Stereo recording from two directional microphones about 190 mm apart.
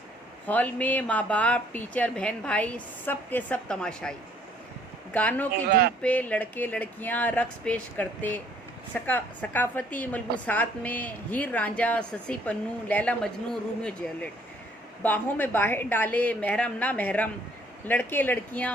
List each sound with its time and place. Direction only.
0.4 s a woman's voice: 10° left (ahead or behind)
5.1 s a woman's voice: 10° left (ahead or behind)